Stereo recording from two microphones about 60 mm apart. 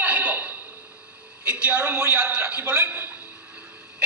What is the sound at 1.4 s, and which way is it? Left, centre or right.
A man's voice, centre.